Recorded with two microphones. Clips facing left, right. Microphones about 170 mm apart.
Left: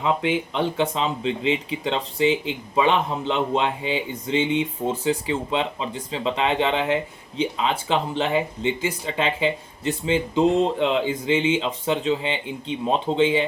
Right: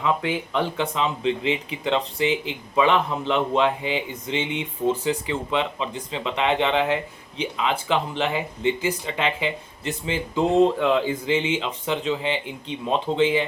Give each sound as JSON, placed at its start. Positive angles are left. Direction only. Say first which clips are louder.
{"t": 0.0, "sound": "speech", "louder": "left 2 dB", "side_deg": 25}